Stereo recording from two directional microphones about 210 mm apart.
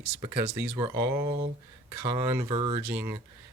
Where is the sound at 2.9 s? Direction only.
10° right (ahead or behind).